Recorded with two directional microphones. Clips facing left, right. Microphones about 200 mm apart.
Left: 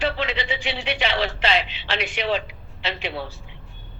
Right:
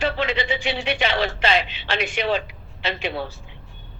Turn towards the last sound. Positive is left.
turn(degrees=-45)  # may be behind; listen again after turning